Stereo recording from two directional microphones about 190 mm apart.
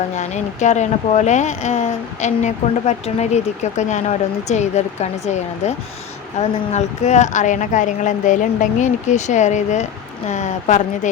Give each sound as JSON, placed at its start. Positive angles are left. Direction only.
{"t": 0.2, "sound": "speech", "side_deg": 40}